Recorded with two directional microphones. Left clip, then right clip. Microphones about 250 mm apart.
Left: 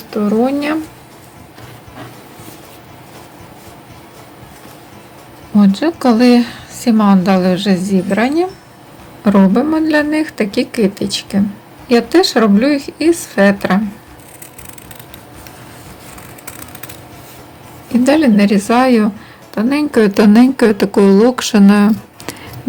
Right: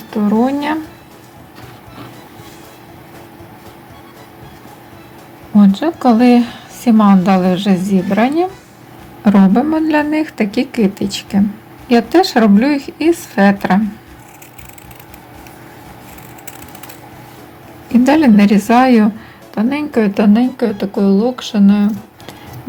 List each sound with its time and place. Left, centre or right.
0.1 s a woman's voice: centre
5.5 s a woman's voice: centre
17.9 s a woman's voice: centre; by 22.4 s left